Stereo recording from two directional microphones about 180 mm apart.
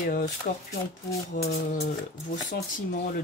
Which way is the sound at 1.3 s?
35° left (ahead or behind).